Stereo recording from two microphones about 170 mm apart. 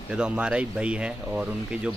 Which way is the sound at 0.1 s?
5° right (ahead or behind).